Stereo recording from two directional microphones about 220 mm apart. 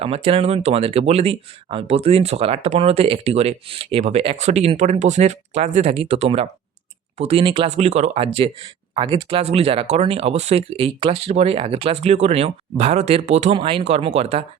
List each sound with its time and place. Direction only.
0.0 s speech: 25° right (ahead or behind)